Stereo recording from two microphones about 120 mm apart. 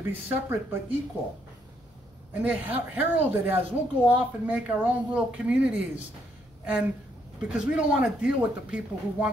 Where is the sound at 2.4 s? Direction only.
15° right (ahead or behind).